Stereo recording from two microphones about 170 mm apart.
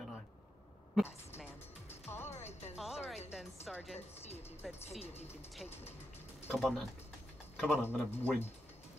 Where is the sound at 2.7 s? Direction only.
Centre (ahead or behind).